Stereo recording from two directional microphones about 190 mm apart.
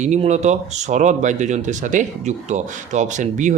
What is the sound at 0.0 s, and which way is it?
Speech, 35° right (ahead or behind).